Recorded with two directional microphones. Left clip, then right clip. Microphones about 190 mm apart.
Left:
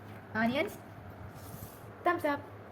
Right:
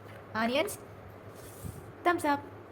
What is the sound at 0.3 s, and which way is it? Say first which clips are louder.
Speech: right 2 dB; 15° right (ahead or behind).